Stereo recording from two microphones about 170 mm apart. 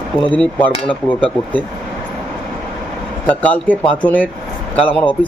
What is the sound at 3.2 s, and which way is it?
Speech, 10° left (ahead or behind).